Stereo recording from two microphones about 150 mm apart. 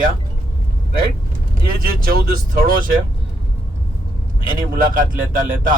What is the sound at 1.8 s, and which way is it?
Speech, 80° right.